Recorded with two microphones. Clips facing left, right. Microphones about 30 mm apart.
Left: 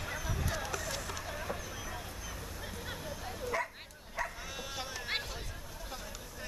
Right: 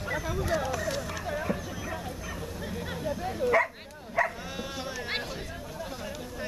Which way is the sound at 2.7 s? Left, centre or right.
Centre.